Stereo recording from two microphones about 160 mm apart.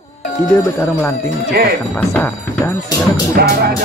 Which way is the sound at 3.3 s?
75° right (ahead or behind).